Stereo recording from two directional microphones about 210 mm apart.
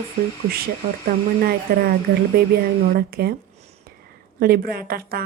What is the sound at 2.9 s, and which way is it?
Speech, 45° right (ahead or behind).